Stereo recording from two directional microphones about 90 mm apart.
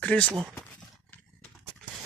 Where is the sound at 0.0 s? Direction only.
15° left (ahead or behind).